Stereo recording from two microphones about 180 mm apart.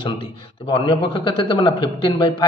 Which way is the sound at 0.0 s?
25° left (ahead or behind).